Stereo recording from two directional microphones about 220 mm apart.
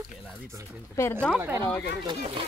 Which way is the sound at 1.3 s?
10° right (ahead or behind).